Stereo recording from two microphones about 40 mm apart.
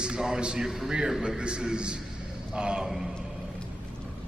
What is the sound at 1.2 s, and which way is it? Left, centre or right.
A man's voice, right.